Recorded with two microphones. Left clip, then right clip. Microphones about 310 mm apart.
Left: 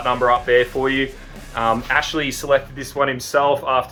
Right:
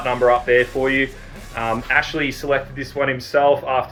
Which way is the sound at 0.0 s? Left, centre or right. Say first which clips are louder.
Right 1 dB; centre.